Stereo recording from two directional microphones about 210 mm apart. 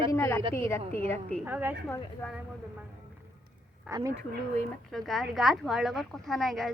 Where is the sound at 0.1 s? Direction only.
10° left (ahead or behind).